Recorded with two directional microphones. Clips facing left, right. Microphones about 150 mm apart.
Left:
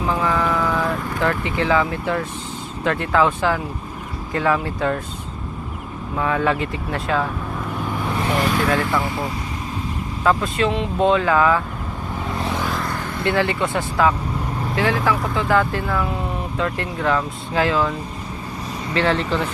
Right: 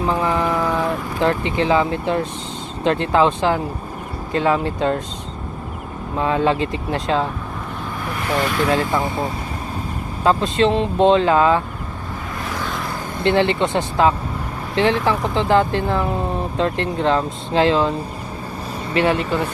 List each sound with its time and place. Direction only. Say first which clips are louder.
0.2 s a sound: right 1 dB; 25° right (ahead or behind)
2.8 s speech: right 2 dB; 25° right (ahead or behind)
6.1 s speech: right 2 dB; 25° right (ahead or behind)
8.7 s speech: right 1 dB; 20° right (ahead or behind)
13.2 s speech: right 4 dB; 25° right (ahead or behind)
18.9 s speech: right 2 dB; 15° right (ahead or behind)